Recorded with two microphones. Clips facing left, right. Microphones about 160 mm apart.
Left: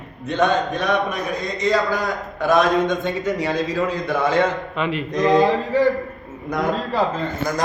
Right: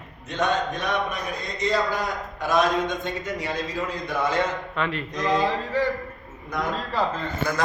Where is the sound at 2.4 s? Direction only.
60° left (ahead or behind).